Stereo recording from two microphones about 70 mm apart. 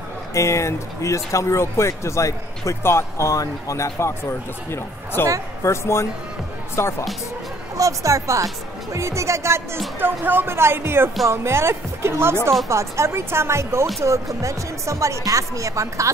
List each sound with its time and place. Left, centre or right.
0.3 s speech: left
7.7 s speech: right
9.9 s speech: right